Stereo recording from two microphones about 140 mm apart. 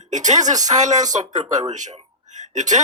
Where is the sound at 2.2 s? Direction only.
60° right (ahead or behind).